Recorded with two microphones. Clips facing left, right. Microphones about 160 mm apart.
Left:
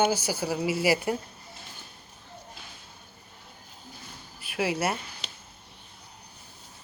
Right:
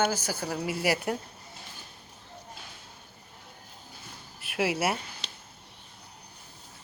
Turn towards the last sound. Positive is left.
turn(degrees=-5)  # may be behind; listen again after turning